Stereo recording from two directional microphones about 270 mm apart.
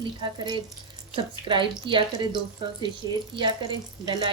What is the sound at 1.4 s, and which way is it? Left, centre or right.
Speech, centre.